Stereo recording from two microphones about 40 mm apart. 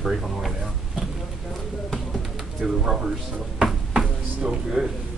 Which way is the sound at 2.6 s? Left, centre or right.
Centre.